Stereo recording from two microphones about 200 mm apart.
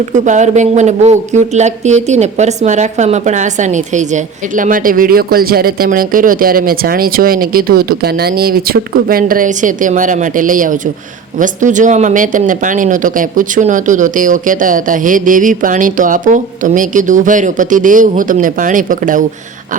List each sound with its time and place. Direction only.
0.3 s speech: 35° right (ahead or behind)